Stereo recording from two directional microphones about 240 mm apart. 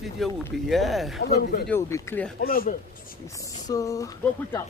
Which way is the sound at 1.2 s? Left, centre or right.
Left.